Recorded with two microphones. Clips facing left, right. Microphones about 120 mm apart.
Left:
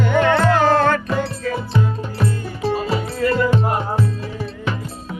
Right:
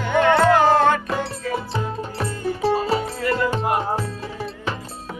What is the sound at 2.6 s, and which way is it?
Music, 35° right (ahead or behind).